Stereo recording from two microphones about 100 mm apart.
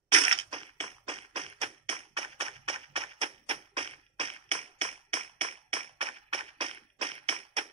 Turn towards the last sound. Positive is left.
turn(degrees=-70)  # may be behind; listen again after turning